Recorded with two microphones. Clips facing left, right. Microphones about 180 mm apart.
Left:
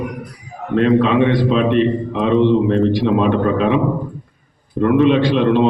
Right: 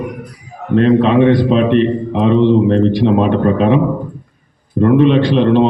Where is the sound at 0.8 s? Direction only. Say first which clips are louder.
Right 3 dB; 35° right (ahead or behind).